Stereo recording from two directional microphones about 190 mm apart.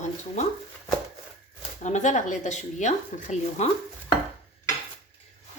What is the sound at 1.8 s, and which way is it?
Speech, 40° left (ahead or behind).